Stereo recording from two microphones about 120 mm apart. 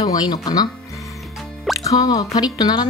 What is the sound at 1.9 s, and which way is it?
Speech, 30° left (ahead or behind).